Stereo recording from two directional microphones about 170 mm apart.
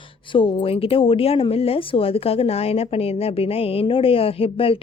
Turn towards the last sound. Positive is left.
turn(degrees=35)  # may be behind; listen again after turning